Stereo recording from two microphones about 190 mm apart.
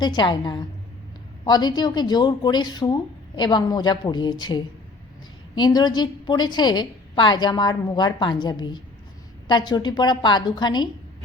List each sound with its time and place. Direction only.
0.0 s a woman's voice: 25° left (ahead or behind)